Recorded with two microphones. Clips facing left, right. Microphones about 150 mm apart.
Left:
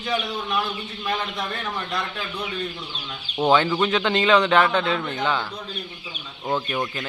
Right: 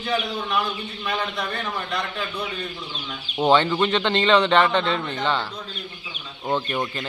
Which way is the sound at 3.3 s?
Centre (ahead or behind).